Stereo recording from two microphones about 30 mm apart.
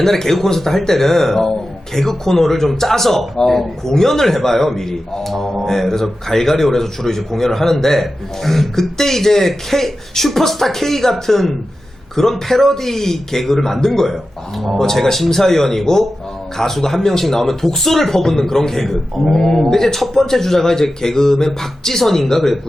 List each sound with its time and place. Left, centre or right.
0.0 s a man's voice: centre